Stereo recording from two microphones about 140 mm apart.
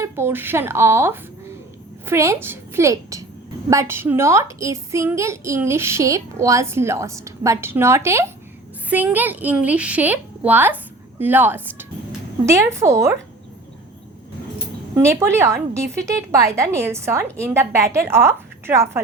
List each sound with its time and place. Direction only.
0.0 s a woman's voice: 20° right (ahead or behind)
14.9 s a woman's voice: 20° right (ahead or behind)